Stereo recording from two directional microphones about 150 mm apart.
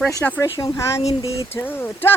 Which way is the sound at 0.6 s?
20° left (ahead or behind).